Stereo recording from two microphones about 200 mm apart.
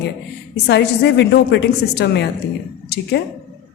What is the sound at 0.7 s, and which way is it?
A woman's voice, 60° left (ahead or behind).